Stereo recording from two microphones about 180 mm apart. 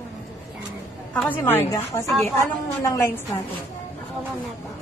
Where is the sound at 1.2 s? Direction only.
10° left (ahead or behind).